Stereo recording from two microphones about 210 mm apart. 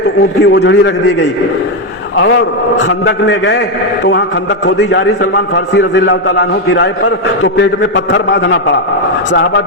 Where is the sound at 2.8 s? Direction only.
60° left (ahead or behind).